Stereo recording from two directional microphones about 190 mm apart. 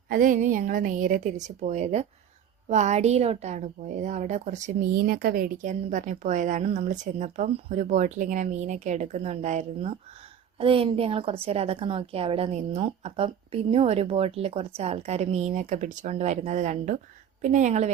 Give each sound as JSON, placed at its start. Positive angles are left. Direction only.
{"t": 0.1, "sound": "a woman's voice", "side_deg": -45}